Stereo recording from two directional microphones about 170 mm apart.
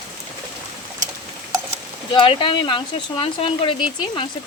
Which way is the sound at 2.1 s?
30° left (ahead or behind).